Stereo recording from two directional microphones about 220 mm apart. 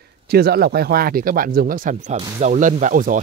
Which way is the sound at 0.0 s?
45° right (ahead or behind).